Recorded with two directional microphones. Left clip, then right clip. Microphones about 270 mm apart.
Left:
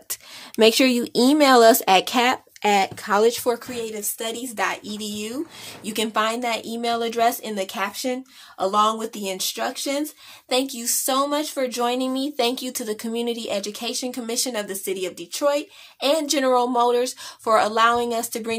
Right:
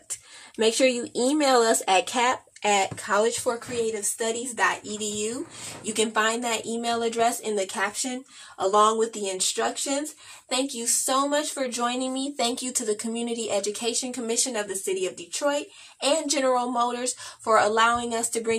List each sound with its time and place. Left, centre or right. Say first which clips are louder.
0.1 s speech: left 6 dB; left